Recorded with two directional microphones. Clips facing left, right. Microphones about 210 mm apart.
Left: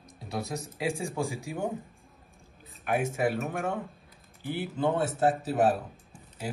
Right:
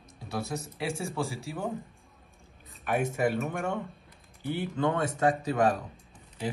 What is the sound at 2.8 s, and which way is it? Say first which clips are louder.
A man's voice: even; 5° left (ahead or behind).